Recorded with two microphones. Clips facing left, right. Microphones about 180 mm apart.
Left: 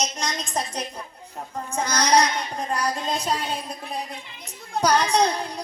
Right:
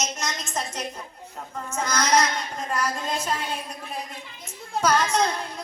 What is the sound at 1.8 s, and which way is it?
Child singing, 35° left (ahead or behind).